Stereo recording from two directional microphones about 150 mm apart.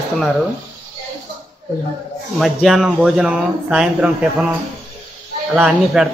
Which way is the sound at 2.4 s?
Centre (ahead or behind).